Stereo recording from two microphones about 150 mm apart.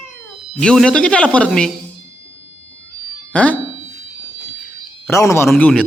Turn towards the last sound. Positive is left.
turn(degrees=10)  # may be behind; listen again after turning